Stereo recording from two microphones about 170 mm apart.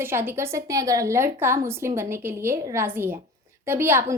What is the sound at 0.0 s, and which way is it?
A woman's voice, 15° right (ahead or behind).